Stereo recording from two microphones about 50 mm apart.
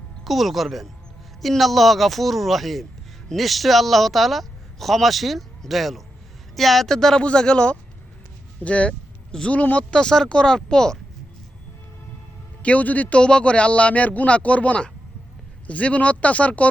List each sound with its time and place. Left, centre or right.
0.3 s speech: centre; by 9.8 s left
9.9 s speech: centre
12.6 s speech: left